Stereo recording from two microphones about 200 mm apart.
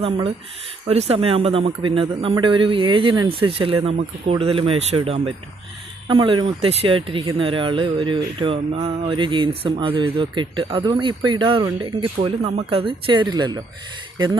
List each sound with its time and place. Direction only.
0.0 s speech: 30° right (ahead or behind)